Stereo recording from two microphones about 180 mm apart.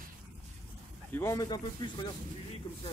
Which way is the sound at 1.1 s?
15° left (ahead or behind).